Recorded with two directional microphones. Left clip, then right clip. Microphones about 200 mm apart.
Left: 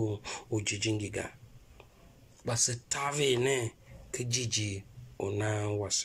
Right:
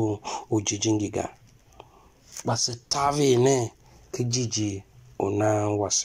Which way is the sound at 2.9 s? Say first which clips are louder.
Right 9 dB; 25° right (ahead or behind).